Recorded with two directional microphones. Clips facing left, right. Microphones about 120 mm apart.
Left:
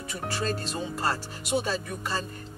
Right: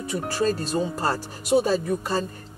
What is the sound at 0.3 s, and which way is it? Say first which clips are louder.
Speech: right 6 dB; 35° right (ahead or behind).